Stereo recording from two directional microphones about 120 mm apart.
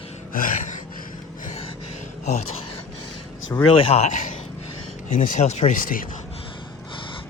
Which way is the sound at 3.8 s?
65° left (ahead or behind).